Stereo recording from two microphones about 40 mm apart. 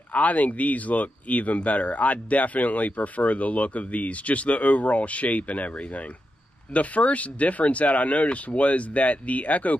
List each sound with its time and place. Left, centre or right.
0.1 s speech: left
6.7 s speech: left